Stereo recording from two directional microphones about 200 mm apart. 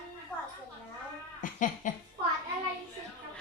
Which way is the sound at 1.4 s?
40° left (ahead or behind).